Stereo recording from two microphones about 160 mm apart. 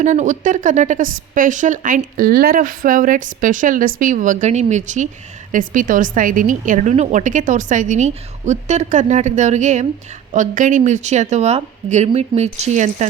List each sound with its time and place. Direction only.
0.0 s a woman's voice: 50° right (ahead or behind)